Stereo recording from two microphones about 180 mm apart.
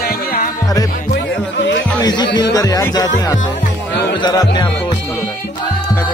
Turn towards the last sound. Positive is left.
turn(degrees=25)  # may be behind; listen again after turning